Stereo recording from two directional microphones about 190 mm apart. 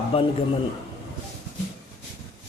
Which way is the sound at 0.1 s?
30° left (ahead or behind).